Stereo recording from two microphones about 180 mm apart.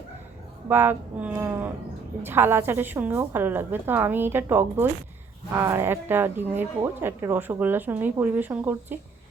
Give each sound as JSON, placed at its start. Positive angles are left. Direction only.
{"t": 0.7, "sound": "speech", "side_deg": -10}